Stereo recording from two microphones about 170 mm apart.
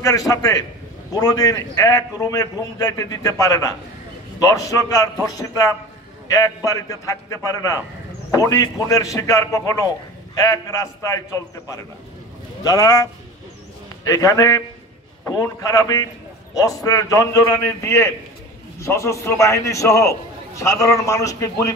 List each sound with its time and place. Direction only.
0.3 s a man's voice: 20° left (ahead or behind)